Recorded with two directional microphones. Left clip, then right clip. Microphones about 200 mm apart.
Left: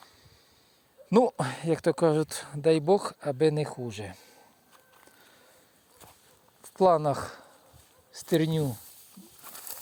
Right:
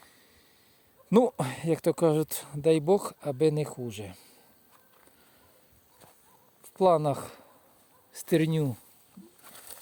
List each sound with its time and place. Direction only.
1.3 s speech: 10° right (ahead or behind)
6.6 s speech: centre (ahead or behind); by 8.8 s 15° right (ahead or behind)
9.4 s a sound: 55° left (ahead or behind)